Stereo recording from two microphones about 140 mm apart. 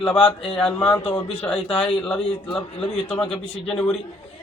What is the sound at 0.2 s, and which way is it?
Speech, 40° left (ahead or behind).